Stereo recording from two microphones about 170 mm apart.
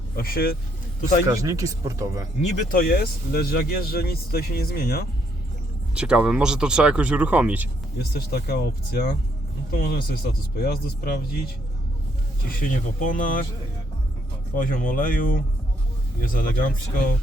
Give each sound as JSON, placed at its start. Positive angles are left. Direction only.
{"t": 0.2, "sound": "speech", "side_deg": 60}
{"t": 1.3, "sound": "speech", "side_deg": -20}
{"t": 2.4, "sound": "speech", "side_deg": 50}
{"t": 5.9, "sound": "speech", "side_deg": -5}
{"t": 8.1, "sound": "speech", "side_deg": 65}
{"t": 12.6, "sound": "speech", "side_deg": 50}
{"t": 14.5, "sound": "speech", "side_deg": 55}